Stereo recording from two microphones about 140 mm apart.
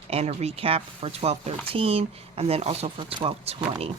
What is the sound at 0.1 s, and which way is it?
Speech, 45° right (ahead or behind).